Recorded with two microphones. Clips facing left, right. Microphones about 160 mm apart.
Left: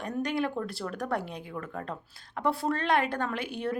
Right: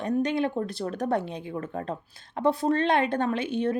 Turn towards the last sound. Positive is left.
turn(degrees=-20)  # may be behind; listen again after turning